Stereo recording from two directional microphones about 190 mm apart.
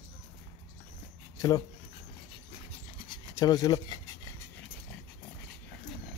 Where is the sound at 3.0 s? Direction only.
20° left (ahead or behind).